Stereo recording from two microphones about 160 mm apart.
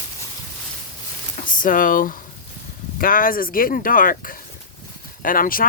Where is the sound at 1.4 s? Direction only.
60° left (ahead or behind).